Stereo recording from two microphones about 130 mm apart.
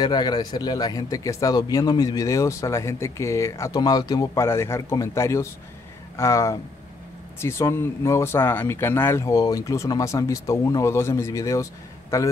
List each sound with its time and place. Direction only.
0.0 s a man's voice: 30° left (ahead or behind)